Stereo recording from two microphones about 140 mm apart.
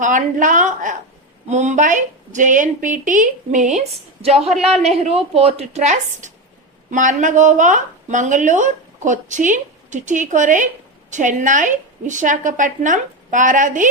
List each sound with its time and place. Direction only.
0.0 s speech: 65° right (ahead or behind)
3.8 s a woman's voice: 50° right (ahead or behind); by 13.8 s 65° right (ahead or behind)